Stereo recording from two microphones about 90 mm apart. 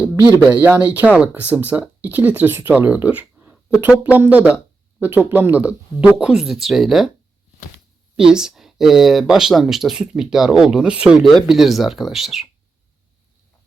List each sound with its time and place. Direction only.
0.6 s speech: 20° right (ahead or behind); by 7.1 s centre (ahead or behind)
8.1 s speech: 10° right (ahead or behind)